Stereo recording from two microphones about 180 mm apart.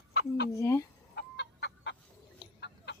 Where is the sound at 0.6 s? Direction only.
15° left (ahead or behind).